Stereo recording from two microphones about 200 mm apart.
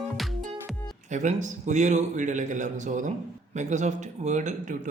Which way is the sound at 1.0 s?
35° right (ahead or behind).